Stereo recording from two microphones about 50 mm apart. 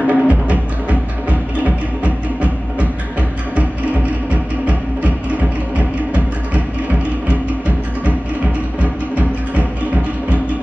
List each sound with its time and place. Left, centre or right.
0.0 s music: right